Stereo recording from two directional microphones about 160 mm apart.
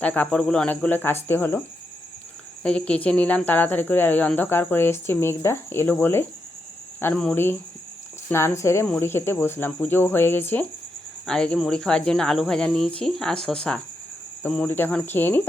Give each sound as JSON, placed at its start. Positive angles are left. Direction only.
{"t": 0.0, "sound": "speech", "side_deg": 10}
{"t": 2.6, "sound": "speech", "side_deg": 5}